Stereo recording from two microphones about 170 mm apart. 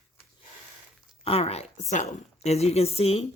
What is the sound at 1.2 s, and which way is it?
Speech, 35° left (ahead or behind).